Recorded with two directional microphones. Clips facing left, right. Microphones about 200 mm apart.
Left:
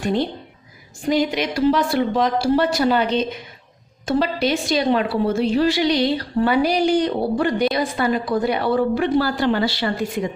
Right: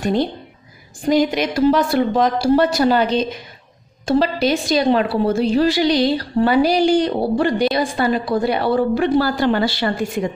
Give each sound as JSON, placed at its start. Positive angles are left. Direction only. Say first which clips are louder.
{"t": 0.0, "sound": "a woman's voice", "louder": "right 2 dB", "side_deg": -40}